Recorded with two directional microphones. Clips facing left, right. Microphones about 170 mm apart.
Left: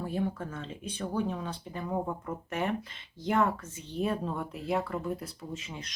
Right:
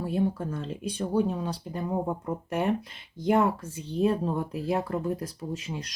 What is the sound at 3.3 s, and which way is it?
Speech, 35° right (ahead or behind).